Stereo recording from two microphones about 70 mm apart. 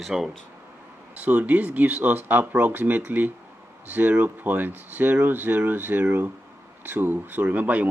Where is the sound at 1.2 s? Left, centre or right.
Right.